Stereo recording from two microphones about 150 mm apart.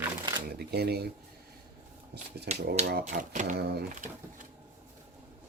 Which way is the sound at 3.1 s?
55° right (ahead or behind).